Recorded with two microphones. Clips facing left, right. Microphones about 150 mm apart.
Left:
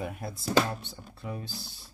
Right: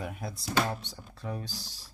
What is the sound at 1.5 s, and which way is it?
Speech, 90° right.